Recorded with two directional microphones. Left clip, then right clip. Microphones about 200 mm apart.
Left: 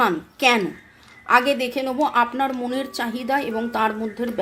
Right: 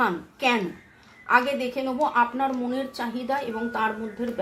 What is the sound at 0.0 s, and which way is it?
A woman's voice, 45° left (ahead or behind).